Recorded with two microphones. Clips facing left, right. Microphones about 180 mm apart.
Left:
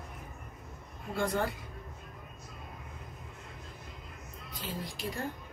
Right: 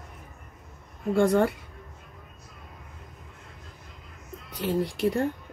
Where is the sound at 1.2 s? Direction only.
70° right (ahead or behind).